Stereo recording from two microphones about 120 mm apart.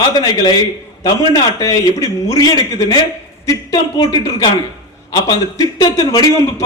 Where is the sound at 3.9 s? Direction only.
35° left (ahead or behind).